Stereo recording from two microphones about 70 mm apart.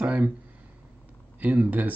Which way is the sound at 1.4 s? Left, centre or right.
Right.